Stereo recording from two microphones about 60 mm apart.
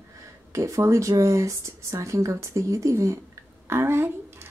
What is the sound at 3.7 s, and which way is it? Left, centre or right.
Speech, right.